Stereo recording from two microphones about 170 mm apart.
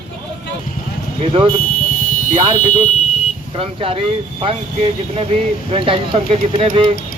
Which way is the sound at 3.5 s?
35° right (ahead or behind).